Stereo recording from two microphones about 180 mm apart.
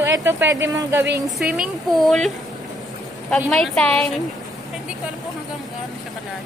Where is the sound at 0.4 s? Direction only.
75° right (ahead or behind).